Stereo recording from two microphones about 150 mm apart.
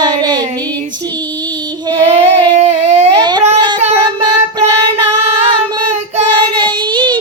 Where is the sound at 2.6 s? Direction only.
50° right (ahead or behind).